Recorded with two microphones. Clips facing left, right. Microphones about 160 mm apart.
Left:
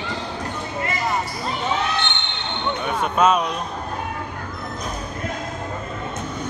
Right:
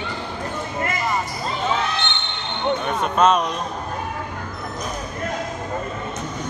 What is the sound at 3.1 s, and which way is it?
Speech, 10° left (ahead or behind).